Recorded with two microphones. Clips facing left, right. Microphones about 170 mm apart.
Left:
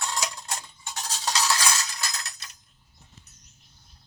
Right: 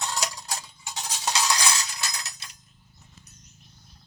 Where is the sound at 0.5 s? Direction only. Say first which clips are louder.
Even; 15° right (ahead or behind).